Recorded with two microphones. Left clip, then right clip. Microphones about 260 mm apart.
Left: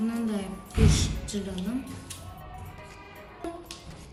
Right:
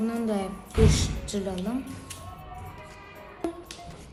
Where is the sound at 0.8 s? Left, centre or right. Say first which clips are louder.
Left 2 dB; centre.